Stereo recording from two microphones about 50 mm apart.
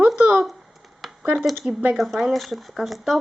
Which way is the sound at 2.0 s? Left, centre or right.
Centre.